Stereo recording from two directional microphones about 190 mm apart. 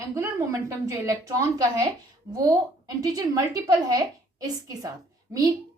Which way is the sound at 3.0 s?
20° right (ahead or behind).